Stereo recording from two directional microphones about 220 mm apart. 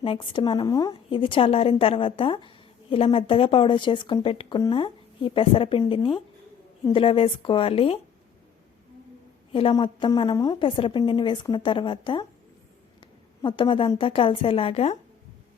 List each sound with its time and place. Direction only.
0.0 s speech: 20° left (ahead or behind)
9.5 s speech: 25° left (ahead or behind)
13.4 s speech: 20° left (ahead or behind)